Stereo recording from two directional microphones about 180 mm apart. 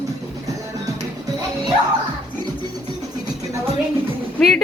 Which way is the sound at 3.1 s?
20° right (ahead or behind).